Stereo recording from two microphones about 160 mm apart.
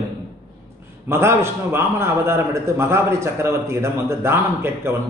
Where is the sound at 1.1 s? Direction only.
15° right (ahead or behind).